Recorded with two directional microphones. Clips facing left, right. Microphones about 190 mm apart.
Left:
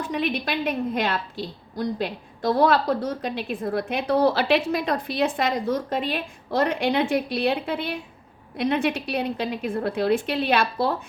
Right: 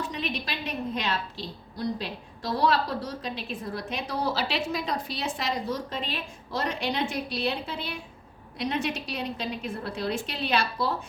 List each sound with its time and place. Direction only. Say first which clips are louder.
0.0 s a woman's voice: left 6 dB; 55° left (ahead or behind)